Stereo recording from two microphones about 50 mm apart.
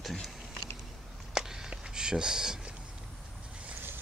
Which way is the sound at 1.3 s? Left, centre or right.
Centre.